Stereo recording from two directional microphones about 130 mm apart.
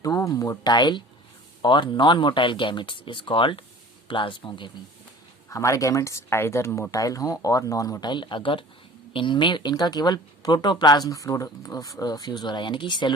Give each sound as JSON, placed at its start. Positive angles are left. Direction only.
{"t": 0.0, "sound": "speech", "side_deg": 25}
{"t": 5.5, "sound": "speech", "side_deg": 25}